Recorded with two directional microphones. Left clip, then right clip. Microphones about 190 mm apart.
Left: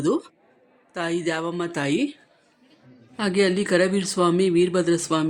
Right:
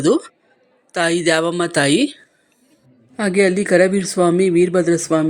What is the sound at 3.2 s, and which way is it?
A woman's voice, 20° right (ahead or behind).